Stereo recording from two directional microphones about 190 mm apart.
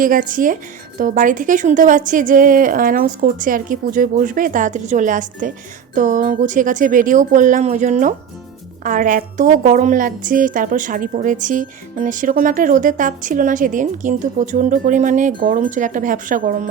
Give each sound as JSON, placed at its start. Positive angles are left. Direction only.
{"t": 0.0, "sound": "a woman's voice", "side_deg": -45}